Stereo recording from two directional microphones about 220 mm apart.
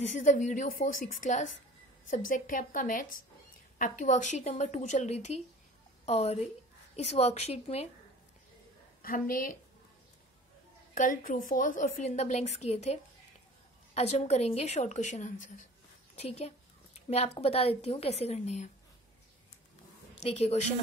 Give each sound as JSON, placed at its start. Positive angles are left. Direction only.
{"t": 0.1, "sound": "a woman's voice", "side_deg": 35}
{"t": 9.0, "sound": "a woman's voice", "side_deg": 40}
{"t": 11.0, "sound": "a woman's voice", "side_deg": 40}
{"t": 20.2, "sound": "a woman's voice", "side_deg": 30}